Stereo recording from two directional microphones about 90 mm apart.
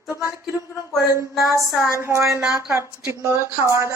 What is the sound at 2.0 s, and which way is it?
A woman's voice, 30° right (ahead or behind).